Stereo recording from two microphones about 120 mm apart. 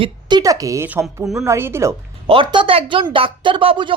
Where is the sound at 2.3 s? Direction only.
45° right (ahead or behind).